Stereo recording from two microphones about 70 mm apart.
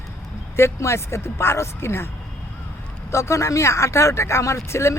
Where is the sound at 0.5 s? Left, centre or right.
Left.